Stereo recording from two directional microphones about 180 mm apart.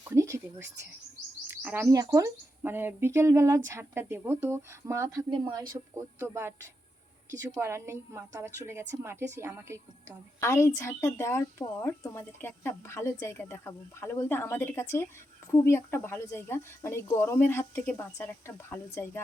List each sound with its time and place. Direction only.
0.0 s a sound: 15° right (ahead or behind)
1.6 s a woman's voice: 10° right (ahead or behind)
7.6 s a woman's voice: 15° right (ahead or behind)
10.4 s a woman's voice: 15° left (ahead or behind)